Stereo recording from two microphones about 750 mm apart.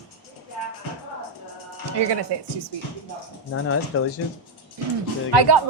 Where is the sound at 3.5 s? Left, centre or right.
Centre.